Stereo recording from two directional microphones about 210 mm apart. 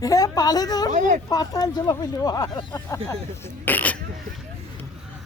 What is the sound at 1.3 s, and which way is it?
Speech, 15° left (ahead or behind).